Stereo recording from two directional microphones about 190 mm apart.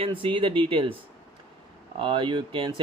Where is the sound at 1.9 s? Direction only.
25° right (ahead or behind).